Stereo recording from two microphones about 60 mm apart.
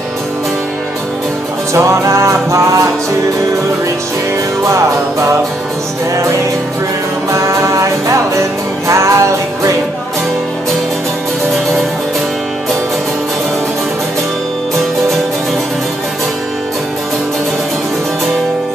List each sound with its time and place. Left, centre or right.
1.7 s music: right
4.6 s music: right
7.2 s music: right